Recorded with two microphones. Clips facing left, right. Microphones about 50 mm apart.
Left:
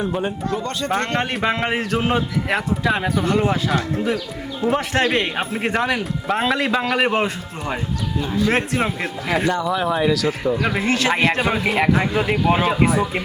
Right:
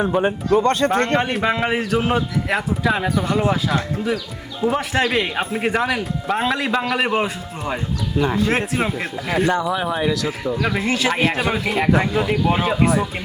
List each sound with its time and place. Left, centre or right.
0.1 s speech: right
0.6 s speech: right
1.2 s a man's voice: centre
8.2 s speech: right
8.4 s a man's voice: centre
9.6 s a man's voice: centre
10.8 s a man's voice: centre